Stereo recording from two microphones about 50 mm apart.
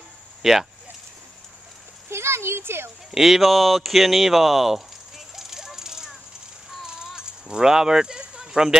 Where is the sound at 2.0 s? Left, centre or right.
Right.